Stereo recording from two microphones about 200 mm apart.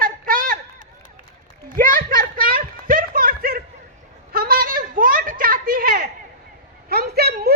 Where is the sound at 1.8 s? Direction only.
45° right (ahead or behind).